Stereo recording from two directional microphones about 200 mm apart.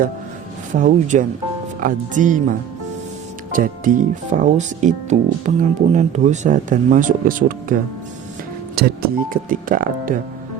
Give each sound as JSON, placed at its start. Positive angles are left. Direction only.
{"t": 0.7, "sound": "speech", "side_deg": -40}